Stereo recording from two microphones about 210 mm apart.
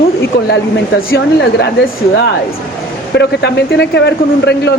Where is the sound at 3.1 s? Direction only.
55° left (ahead or behind).